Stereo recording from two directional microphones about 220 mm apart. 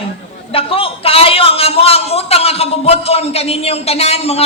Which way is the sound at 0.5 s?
25° left (ahead or behind).